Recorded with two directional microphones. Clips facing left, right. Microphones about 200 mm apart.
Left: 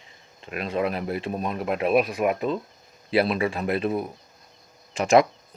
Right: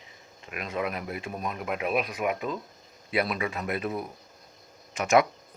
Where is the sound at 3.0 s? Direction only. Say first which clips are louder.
Left 6 dB; 30° left (ahead or behind).